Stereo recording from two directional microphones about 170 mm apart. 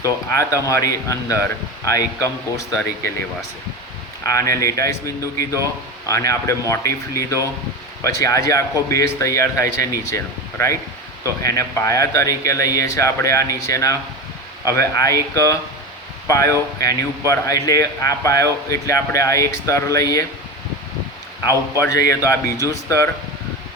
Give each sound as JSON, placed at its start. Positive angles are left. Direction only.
{"t": 0.0, "sound": "speech", "side_deg": 15}
{"t": 4.2, "sound": "speech", "side_deg": 20}
{"t": 21.4, "sound": "speech", "side_deg": 20}